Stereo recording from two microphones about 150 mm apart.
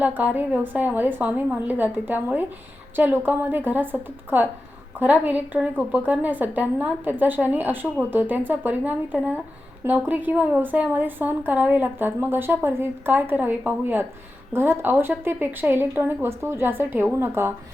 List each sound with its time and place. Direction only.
0.0 s a woman's voice: 10° right (ahead or behind)